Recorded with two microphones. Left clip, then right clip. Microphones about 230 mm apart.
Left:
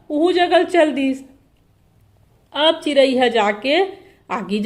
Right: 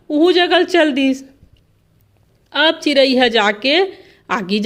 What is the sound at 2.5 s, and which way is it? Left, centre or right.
A woman's voice, right.